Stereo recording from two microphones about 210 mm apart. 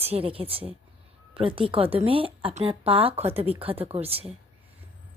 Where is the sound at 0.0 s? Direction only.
25° right (ahead or behind).